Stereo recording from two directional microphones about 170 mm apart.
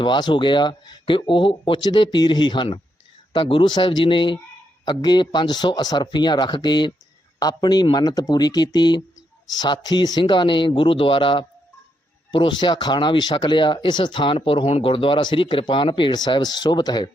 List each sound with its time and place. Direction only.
0.0 s speech: 25° left (ahead or behind)